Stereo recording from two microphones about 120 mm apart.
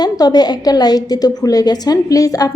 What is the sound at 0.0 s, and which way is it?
A woman's voice, 35° left (ahead or behind).